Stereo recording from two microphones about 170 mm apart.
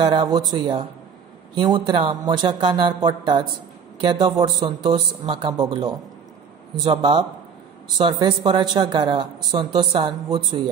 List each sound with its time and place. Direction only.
0.0 s speech: 25° right (ahead or behind)